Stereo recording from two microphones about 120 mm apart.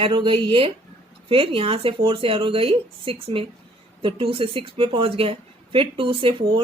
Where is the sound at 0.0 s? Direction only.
40° right (ahead or behind).